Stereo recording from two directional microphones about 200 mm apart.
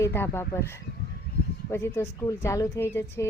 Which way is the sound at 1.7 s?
15° left (ahead or behind).